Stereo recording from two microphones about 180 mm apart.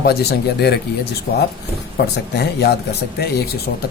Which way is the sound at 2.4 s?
65° left (ahead or behind).